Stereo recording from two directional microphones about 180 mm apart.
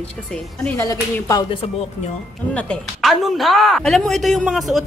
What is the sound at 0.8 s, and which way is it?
Speech, 20° left (ahead or behind).